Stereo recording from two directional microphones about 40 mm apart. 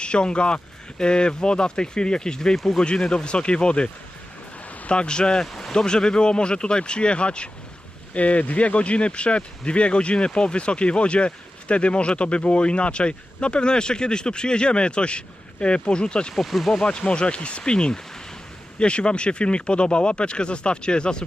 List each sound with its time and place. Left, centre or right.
0.0 s speech: left
4.9 s speech: left
16.3 s speech: centre
16.7 s speech: left